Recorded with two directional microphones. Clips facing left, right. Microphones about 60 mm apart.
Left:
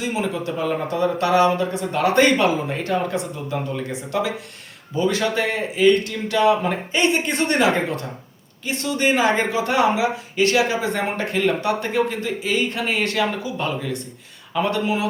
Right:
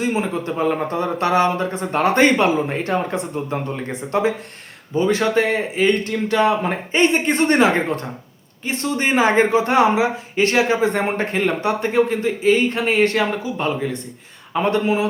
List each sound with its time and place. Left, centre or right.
0.0 s speech: right